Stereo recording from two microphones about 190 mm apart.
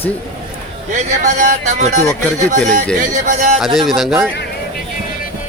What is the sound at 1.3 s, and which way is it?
Speech, 45° right (ahead or behind).